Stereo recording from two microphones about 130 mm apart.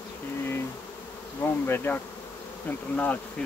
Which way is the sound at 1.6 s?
15° left (ahead or behind).